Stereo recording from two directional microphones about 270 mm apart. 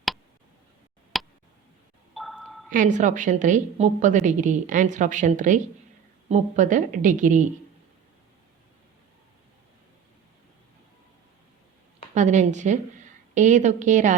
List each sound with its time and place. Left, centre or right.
1.1 s a sound: centre
2.6 s a woman's voice: right
12.1 s a woman's voice: right